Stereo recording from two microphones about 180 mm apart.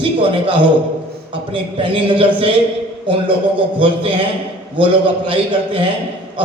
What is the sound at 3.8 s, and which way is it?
A man's voice, 30° right (ahead or behind).